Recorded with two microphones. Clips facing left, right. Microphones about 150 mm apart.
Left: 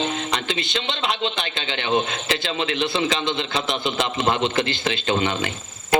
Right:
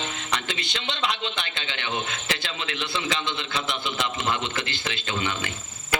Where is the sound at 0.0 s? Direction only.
25° left (ahead or behind).